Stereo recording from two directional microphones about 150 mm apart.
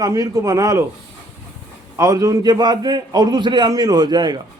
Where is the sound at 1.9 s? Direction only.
20° right (ahead or behind).